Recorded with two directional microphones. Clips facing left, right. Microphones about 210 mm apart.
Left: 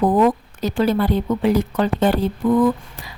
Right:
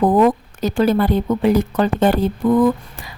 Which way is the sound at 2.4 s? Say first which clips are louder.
Right 2 dB; 40° right (ahead or behind).